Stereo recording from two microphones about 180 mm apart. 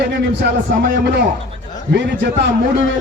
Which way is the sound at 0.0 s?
60° right (ahead or behind).